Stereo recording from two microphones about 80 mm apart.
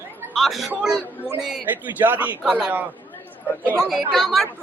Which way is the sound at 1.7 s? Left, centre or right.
Right.